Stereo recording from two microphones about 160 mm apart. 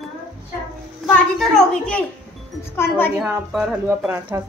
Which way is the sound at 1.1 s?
5° left (ahead or behind).